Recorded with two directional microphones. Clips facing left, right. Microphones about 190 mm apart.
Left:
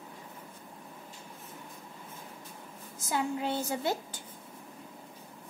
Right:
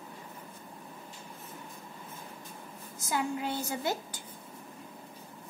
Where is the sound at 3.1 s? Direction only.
25° left (ahead or behind).